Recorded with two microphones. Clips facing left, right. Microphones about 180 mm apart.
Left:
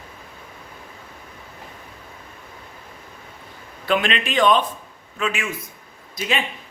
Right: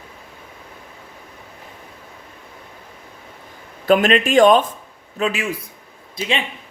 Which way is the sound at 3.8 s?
45° right (ahead or behind).